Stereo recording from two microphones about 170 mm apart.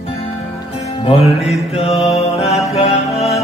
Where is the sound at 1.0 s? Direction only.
35° left (ahead or behind).